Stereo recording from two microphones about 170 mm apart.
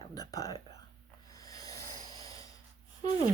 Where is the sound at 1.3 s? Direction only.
20° left (ahead or behind).